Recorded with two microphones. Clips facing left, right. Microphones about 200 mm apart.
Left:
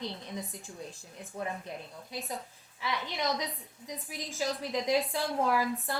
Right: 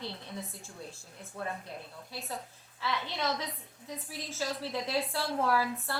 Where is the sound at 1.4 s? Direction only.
15° left (ahead or behind).